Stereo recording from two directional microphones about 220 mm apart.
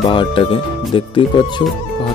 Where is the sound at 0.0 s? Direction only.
20° left (ahead or behind).